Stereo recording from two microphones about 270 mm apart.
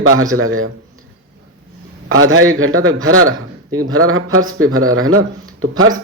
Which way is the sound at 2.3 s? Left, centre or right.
Right.